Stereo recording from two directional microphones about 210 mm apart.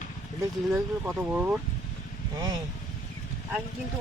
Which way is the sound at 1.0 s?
10° right (ahead or behind).